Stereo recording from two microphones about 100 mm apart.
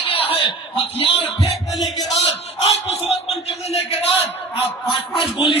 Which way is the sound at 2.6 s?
85° left.